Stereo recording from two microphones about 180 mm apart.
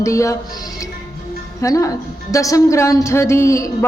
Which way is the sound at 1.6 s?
15° left (ahead or behind).